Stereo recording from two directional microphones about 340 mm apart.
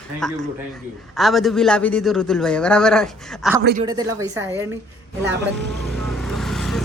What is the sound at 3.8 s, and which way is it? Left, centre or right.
Speech, centre.